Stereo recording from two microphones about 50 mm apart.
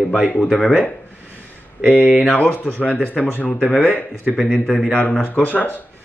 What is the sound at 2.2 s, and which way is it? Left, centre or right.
Speech, left.